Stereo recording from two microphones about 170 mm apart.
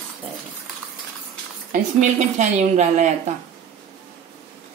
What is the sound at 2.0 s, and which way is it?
A woman's voice, 45° right (ahead or behind).